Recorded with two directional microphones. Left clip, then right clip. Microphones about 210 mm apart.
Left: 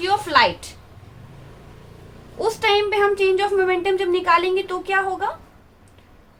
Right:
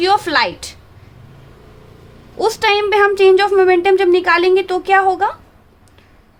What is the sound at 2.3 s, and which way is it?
A woman's voice, 45° right (ahead or behind).